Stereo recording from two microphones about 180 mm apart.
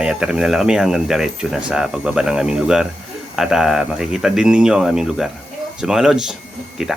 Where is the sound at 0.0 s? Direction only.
5° right (ahead or behind).